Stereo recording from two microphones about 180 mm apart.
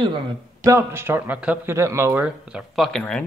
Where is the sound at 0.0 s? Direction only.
25° right (ahead or behind).